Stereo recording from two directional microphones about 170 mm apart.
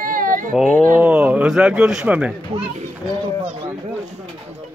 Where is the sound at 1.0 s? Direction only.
5° right (ahead or behind).